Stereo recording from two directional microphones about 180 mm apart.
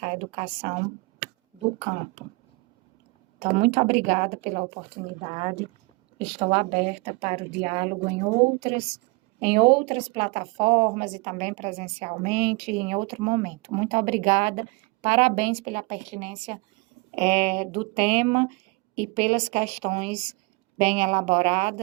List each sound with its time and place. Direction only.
0.0 s speech: 35° right (ahead or behind)
1.8 s a woman's voice: 40° right (ahead or behind)
3.4 s a woman's voice: 35° right (ahead or behind)